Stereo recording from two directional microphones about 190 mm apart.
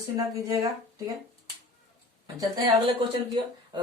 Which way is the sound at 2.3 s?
20° right (ahead or behind).